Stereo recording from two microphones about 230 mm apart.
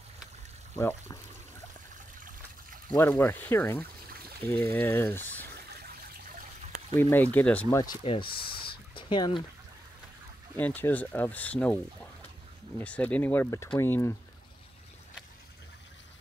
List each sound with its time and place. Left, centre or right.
2.9 s speech: centre
7.0 s speech: centre
7.8 s speech: left
10.5 s speech: centre